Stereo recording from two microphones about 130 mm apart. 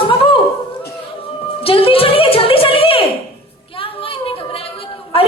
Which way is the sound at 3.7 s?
45° left (ahead or behind).